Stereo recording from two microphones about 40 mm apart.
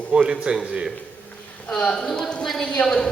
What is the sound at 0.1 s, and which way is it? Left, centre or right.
Speech, right.